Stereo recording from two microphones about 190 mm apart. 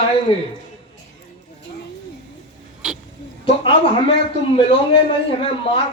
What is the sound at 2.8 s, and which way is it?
Oink, 5° right (ahead or behind).